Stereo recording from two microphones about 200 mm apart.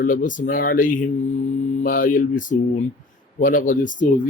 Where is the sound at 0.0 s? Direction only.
40° left (ahead or behind).